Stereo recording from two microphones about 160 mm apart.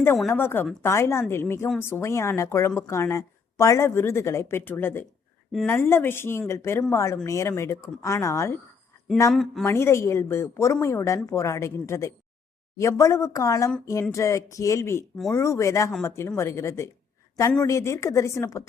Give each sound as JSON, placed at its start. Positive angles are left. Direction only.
{"t": 0.3, "sound": "a woman's voice", "side_deg": 15}
{"t": 9.3, "sound": "speech", "side_deg": 0}
{"t": 9.6, "sound": "a woman's voice", "side_deg": 15}